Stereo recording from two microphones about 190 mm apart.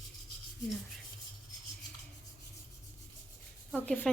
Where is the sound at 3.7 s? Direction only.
5° left (ahead or behind).